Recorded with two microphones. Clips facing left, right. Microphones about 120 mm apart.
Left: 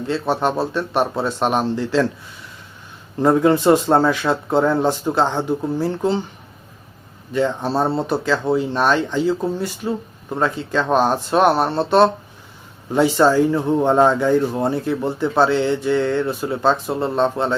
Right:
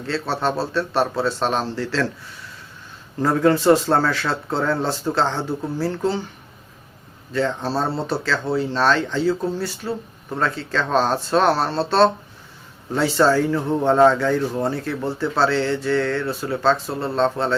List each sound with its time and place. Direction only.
0.1 s speech: 15° left (ahead or behind)
3.2 s speech: 20° left (ahead or behind)
7.3 s speech: 15° left (ahead or behind)